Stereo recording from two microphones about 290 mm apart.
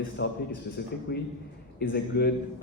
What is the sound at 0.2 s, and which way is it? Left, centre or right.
A man's voice, left.